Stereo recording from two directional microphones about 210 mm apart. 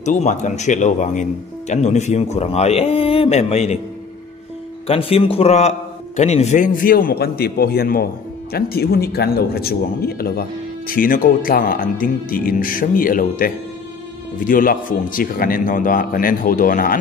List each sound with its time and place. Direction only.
0.0 s a man's voice: 35° left (ahead or behind)
4.8 s a man's voice: 25° left (ahead or behind); by 16.9 s 40° left (ahead or behind)